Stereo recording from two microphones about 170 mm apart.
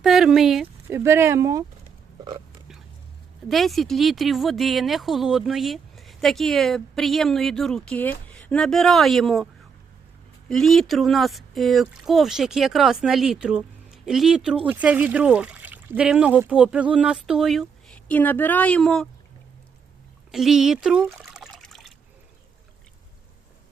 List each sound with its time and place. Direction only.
0.0 s speech: centre (ahead or behind)
0.9 s speech: 15° right (ahead or behind)
3.5 s speech: centre (ahead or behind)
10.5 s speech: centre (ahead or behind)
20.3 s water: centre (ahead or behind)